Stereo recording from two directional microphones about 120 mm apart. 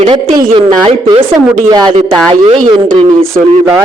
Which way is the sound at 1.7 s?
35° right (ahead or behind).